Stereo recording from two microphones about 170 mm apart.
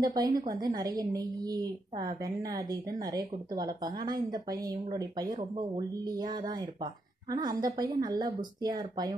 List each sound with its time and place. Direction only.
0.0 s speech: 20° right (ahead or behind)